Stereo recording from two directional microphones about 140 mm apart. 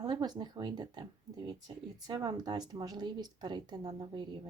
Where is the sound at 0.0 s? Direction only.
30° right (ahead or behind).